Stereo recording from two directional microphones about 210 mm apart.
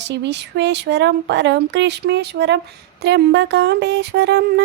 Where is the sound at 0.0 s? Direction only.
55° right (ahead or behind).